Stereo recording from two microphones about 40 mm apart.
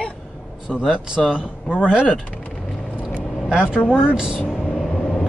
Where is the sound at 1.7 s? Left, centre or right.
Right.